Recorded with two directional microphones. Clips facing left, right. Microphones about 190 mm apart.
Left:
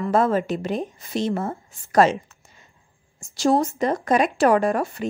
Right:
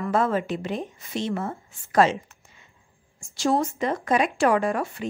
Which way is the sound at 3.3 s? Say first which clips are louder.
Left 3 dB; 35° left (ahead or behind).